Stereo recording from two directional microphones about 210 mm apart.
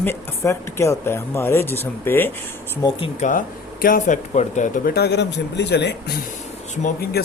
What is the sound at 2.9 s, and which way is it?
Speech, 25° left (ahead or behind).